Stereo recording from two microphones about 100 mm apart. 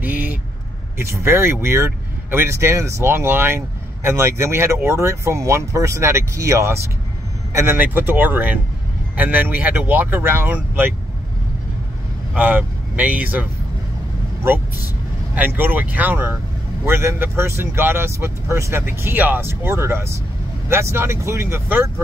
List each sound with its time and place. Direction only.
0.0 s vehicle: 20° right (ahead or behind)
0.9 s speech: 25° right (ahead or behind)
12.4 s speech: 15° right (ahead or behind)
15.3 s speech: 20° right (ahead or behind)